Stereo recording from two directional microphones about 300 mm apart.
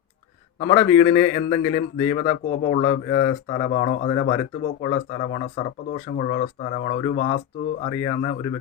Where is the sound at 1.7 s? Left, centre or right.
Left.